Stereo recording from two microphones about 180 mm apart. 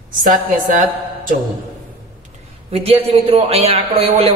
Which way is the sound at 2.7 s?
35° right (ahead or behind).